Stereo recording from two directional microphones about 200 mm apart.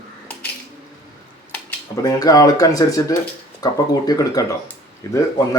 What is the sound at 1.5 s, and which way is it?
Speech, 15° left (ahead or behind).